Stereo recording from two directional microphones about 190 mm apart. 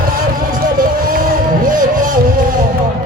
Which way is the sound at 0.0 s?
50° right (ahead or behind).